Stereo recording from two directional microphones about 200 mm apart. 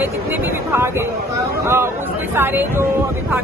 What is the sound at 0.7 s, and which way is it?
Speech, 10° right (ahead or behind).